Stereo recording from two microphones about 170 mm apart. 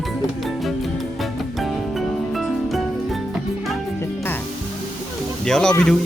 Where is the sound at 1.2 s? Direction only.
Centre (ahead or behind).